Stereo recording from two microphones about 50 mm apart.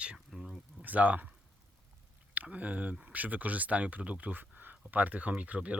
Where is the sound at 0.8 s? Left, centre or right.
Right.